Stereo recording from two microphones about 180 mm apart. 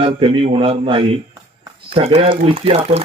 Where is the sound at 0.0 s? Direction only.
30° right (ahead or behind).